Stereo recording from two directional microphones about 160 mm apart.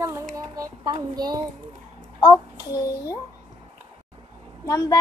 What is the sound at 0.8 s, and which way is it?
Speech, 25° right (ahead or behind).